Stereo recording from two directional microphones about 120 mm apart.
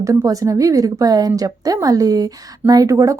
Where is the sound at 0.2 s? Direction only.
30° right (ahead or behind).